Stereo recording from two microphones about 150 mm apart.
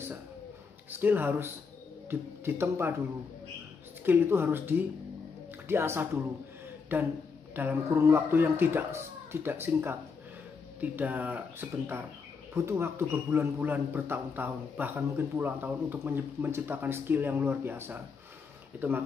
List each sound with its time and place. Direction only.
0.8 s a man's voice: 15° right (ahead or behind)
4.0 s a man's voice: 15° right (ahead or behind)